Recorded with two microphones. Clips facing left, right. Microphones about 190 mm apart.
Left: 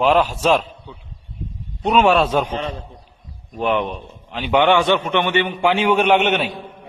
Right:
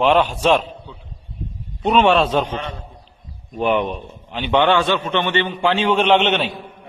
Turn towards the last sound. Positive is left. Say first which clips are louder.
# even
turn(degrees=10)  # may be behind; listen again after turning